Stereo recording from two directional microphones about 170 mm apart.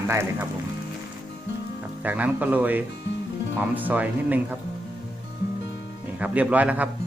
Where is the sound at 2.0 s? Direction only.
10° right (ahead or behind).